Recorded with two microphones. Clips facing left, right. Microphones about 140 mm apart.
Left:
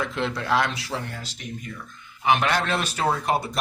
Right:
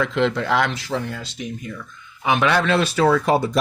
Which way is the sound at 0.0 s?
90° right.